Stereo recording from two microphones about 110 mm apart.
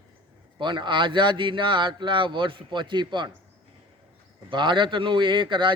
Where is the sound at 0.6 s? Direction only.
45° right (ahead or behind).